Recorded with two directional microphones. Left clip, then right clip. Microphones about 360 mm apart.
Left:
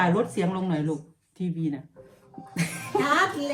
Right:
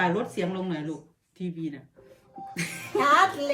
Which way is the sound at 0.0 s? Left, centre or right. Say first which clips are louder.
Left 2 dB; centre.